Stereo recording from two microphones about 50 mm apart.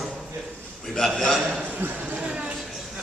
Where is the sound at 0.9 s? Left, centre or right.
Centre.